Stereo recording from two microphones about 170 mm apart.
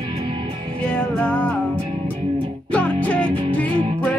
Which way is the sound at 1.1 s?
5° left (ahead or behind).